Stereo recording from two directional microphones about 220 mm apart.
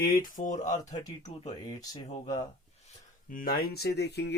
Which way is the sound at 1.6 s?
20° left (ahead or behind).